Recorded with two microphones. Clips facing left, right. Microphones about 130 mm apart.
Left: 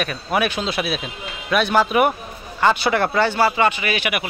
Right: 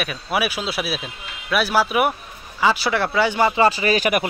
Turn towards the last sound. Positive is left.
turn(degrees=-40)  # may be behind; listen again after turning